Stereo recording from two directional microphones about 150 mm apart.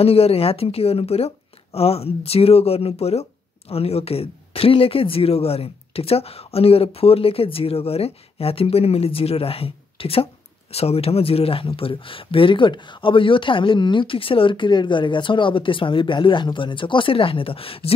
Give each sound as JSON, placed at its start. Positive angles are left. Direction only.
{"t": 0.0, "sound": "speech", "side_deg": 40}